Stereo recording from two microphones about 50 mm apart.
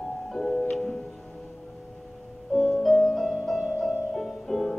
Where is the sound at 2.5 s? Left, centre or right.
Centre.